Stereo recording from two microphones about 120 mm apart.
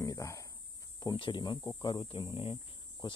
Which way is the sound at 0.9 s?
40° left (ahead or behind).